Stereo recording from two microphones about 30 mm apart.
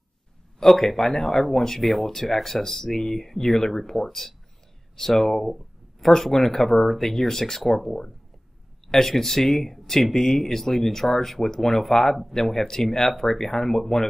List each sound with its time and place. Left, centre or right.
0.6 s speech: centre
7.6 s speech: centre